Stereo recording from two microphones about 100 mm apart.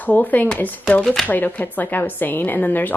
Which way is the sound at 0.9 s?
5° left (ahead or behind).